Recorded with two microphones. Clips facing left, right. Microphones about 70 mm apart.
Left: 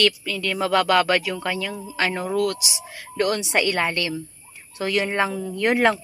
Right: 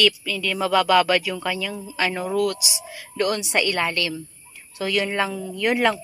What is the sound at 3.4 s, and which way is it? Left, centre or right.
A woman's voice, centre.